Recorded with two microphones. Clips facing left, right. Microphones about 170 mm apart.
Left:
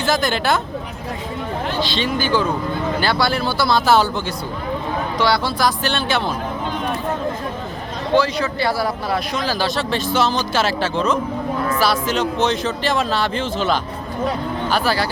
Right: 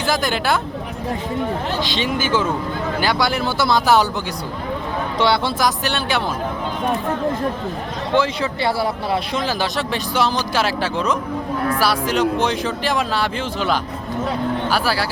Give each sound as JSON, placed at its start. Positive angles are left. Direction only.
{"t": 0.0, "sound": "speech", "side_deg": -10}
{"t": 1.8, "sound": "speech", "side_deg": -15}
{"t": 5.2, "sound": "speech", "side_deg": -20}
{"t": 8.1, "sound": "speech", "side_deg": -25}